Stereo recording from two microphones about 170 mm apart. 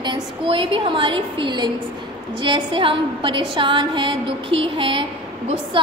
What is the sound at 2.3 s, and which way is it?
A woman's voice, 30° right (ahead or behind).